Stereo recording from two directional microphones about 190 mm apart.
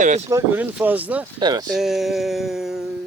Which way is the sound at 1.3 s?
20° right (ahead or behind).